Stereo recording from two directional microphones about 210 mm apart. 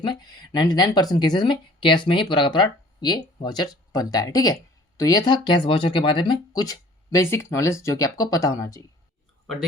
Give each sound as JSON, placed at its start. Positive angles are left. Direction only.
{"t": 0.0, "sound": "speech", "side_deg": 20}